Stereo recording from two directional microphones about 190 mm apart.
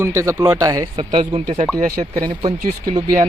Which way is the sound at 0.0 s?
15° right (ahead or behind).